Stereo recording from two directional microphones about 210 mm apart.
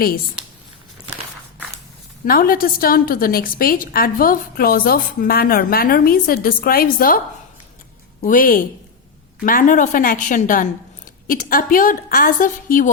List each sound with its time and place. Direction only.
2.2 s a woman's voice: 45° left (ahead or behind)
8.2 s a woman's voice: 40° left (ahead or behind)